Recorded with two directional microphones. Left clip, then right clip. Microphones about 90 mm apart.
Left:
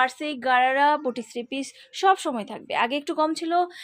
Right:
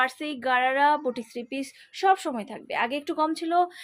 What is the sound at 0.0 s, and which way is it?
A woman's voice, 25° left (ahead or behind).